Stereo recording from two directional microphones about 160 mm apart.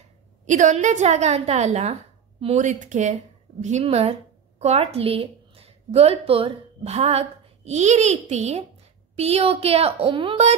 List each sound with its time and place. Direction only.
0.5 s a woman's voice: 50° right (ahead or behind)